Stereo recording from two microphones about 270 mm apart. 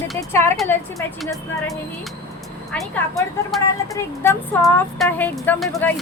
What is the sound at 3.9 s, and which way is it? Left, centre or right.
Speech, centre.